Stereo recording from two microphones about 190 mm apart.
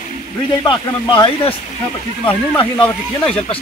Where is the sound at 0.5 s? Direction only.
25° left (ahead or behind).